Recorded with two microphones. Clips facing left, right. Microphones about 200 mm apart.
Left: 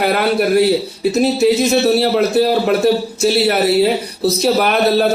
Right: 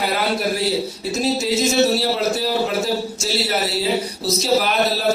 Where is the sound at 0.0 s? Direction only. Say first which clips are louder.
Left 6 dB; 60° left (ahead or behind).